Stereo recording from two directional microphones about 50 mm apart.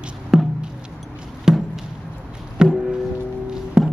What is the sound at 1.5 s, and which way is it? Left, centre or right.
Chop, centre.